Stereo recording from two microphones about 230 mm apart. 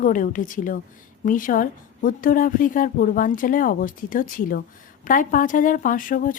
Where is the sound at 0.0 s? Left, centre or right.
Left.